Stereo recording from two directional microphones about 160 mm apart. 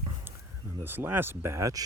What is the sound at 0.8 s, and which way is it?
Speech, 15° right (ahead or behind).